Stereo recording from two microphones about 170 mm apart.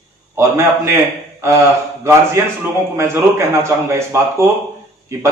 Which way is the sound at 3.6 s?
15° right (ahead or behind).